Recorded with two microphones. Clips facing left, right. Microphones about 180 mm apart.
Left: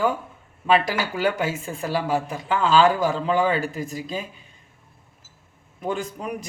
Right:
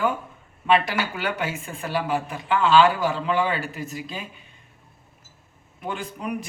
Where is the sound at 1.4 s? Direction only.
30° left (ahead or behind).